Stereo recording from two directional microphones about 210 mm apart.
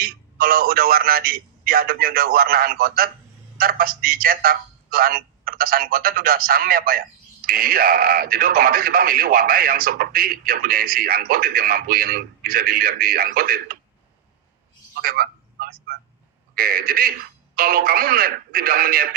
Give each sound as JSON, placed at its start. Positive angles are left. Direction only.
{"t": 0.0, "sound": "speech", "side_deg": -45}
{"t": 14.9, "sound": "telephone", "side_deg": -45}
{"t": 16.6, "sound": "speech", "side_deg": -45}